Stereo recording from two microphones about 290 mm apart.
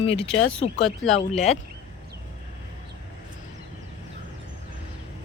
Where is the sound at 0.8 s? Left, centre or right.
Centre.